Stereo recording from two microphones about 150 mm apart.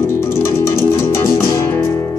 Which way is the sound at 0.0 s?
20° left (ahead or behind).